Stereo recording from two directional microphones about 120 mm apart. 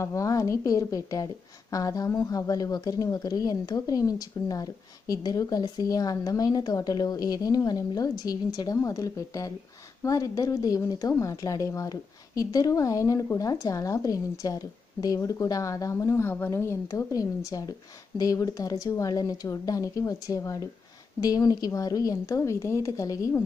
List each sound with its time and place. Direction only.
0.0 s a woman's voice: 25° left (ahead or behind)